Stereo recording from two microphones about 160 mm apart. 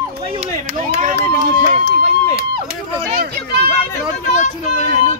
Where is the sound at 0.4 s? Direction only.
50° right (ahead or behind).